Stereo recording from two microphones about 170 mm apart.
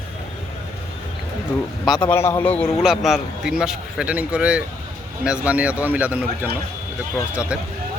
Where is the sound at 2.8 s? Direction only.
Centre (ahead or behind).